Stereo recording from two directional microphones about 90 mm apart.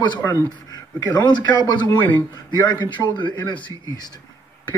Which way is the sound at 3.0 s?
5° right (ahead or behind).